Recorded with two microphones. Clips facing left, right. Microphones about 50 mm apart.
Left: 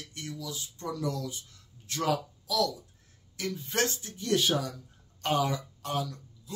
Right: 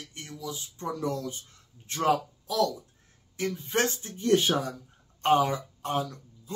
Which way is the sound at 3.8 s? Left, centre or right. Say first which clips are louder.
Right 3 dB; right.